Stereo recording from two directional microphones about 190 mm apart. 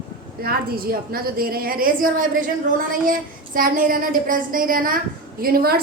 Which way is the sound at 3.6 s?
45° right (ahead or behind).